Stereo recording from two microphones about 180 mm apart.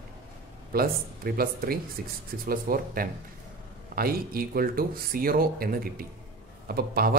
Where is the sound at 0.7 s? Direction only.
55° right (ahead or behind).